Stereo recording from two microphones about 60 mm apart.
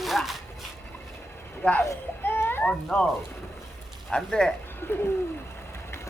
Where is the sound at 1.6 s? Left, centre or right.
Left.